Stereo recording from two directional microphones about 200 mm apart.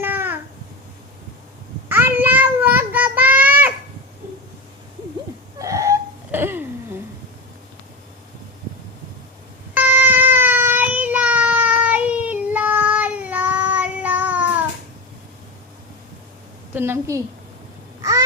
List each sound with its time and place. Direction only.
0.0 s babbling: 10° right (ahead or behind)
1.9 s child singing: 10° right (ahead or behind)
5.5 s a sound: 15° right (ahead or behind)
9.7 s child singing: 10° right (ahead or behind)
16.7 s a sound: 10° right (ahead or behind)
18.0 s duck: 15° right (ahead or behind)